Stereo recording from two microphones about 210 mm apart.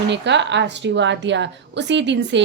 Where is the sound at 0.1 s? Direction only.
55° right (ahead or behind).